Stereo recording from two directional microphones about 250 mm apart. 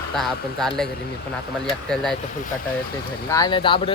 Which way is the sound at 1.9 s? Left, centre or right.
Centre.